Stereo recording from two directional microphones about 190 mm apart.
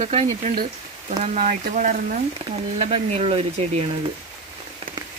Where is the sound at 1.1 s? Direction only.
35° right (ahead or behind).